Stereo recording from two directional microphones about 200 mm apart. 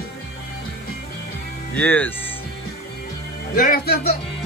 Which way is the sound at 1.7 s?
10° left (ahead or behind).